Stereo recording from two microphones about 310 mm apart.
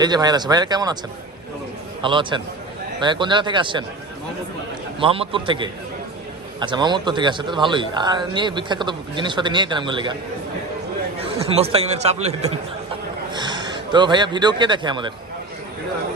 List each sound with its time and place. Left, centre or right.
0.0 s a man's voice: centre
2.0 s a man's voice: centre
4.9 s a man's voice: centre
11.4 s a man's voice: centre